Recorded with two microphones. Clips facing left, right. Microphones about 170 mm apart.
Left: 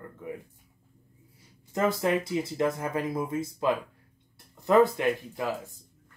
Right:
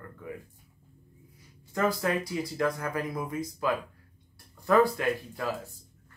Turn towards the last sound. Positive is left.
turn(degrees=20)  # may be behind; listen again after turning